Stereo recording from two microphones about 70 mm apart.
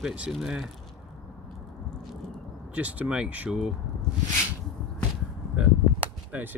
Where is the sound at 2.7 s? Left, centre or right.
Right.